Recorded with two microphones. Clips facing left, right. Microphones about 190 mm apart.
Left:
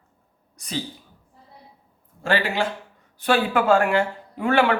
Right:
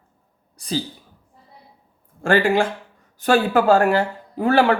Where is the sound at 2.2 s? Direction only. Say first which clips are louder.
Right 6 dB; 50° right (ahead or behind).